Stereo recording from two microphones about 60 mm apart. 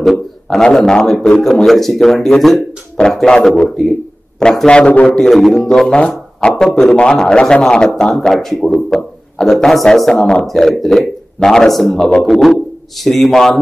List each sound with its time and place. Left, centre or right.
0.0 s a man's voice: centre
4.6 s a man's voice: centre
5.1 s a man's voice: centre